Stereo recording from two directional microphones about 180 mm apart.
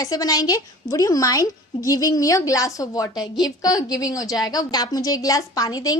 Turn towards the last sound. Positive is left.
turn(degrees=20)  # may be behind; listen again after turning